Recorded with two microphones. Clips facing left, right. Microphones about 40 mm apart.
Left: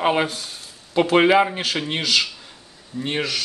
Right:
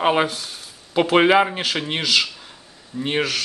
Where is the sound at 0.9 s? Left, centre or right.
Centre.